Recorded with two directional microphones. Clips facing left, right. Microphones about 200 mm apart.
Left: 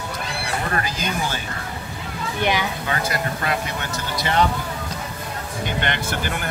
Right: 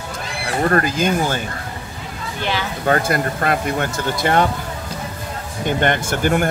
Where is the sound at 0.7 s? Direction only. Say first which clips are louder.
Right 12 dB; 50° right (ahead or behind).